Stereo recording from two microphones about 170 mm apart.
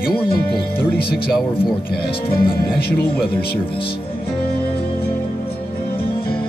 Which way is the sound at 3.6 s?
30° left (ahead or behind).